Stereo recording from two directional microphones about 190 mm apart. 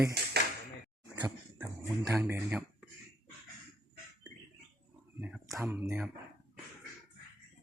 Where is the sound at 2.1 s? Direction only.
10° right (ahead or behind).